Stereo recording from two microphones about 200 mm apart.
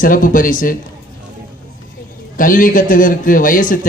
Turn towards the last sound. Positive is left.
turn(degrees=40)  # may be behind; listen again after turning